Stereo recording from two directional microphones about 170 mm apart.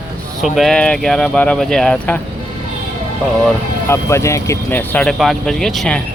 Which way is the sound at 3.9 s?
15° left (ahead or behind).